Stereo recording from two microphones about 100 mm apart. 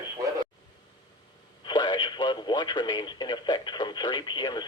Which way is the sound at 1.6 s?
50° left (ahead or behind).